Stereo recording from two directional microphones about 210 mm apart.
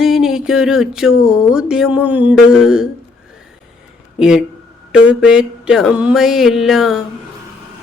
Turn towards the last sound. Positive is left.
turn(degrees=0)  # may be behind; listen again after turning